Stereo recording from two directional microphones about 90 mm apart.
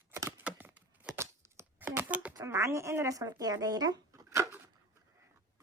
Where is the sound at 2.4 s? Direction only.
35° right (ahead or behind).